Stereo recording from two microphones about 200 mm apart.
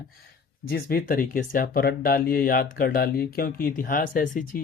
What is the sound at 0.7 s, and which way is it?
Speech, 45° left (ahead or behind).